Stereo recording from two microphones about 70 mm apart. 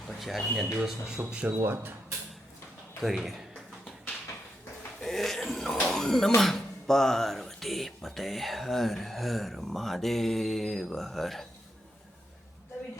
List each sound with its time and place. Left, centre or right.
0.2 s speech: centre
1.3 s speech: centre
1.6 s speech: right
3.0 s speech: centre
4.9 s speech: centre